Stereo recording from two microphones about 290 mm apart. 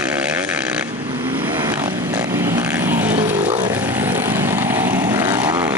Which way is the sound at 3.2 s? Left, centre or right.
Right.